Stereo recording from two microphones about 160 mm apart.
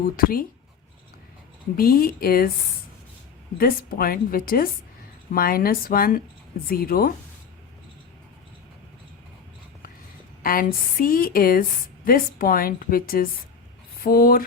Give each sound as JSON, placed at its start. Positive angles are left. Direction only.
{"t": 0.2, "sound": "a woman's voice", "side_deg": 65}
{"t": 1.7, "sound": "a woman's voice", "side_deg": 65}
{"t": 3.6, "sound": "a woman's voice", "side_deg": 65}
{"t": 10.4, "sound": "a woman's voice", "side_deg": 65}